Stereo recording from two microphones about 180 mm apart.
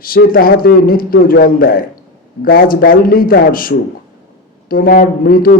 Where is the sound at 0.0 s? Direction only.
55° left (ahead or behind).